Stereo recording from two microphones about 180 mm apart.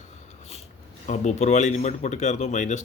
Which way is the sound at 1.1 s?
40° left (ahead or behind).